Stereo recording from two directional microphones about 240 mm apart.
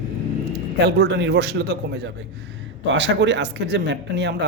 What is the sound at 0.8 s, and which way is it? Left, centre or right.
Speech, right.